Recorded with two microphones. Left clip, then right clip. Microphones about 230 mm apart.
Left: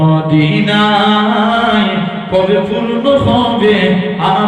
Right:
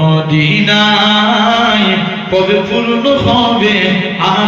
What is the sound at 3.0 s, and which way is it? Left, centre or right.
Mantra, right.